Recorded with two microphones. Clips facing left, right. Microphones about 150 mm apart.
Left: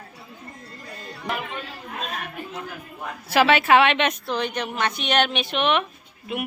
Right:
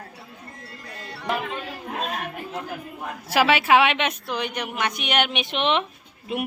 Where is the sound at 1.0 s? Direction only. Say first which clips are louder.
Even; 75° right (ahead or behind).